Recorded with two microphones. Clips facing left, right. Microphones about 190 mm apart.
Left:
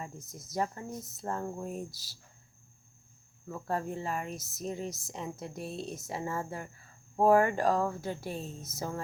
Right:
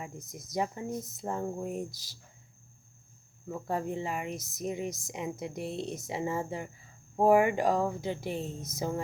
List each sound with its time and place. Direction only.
0.0 s speech: 15° right (ahead or behind)
3.5 s speech: 15° right (ahead or behind)